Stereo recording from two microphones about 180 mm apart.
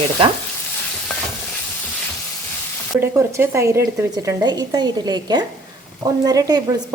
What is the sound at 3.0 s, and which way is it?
A woman's voice, 15° right (ahead or behind).